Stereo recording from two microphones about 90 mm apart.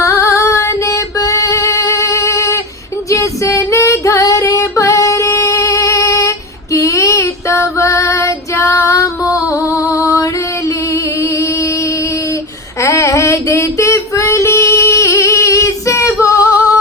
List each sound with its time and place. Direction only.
0.0 s female singing: 35° left (ahead or behind)
6.7 s child singing: 35° left (ahead or behind)
12.8 s female singing: 35° left (ahead or behind)